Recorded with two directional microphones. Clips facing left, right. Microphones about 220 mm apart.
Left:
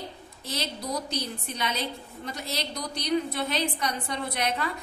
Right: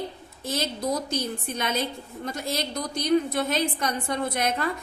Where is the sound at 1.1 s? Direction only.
50° right (ahead or behind).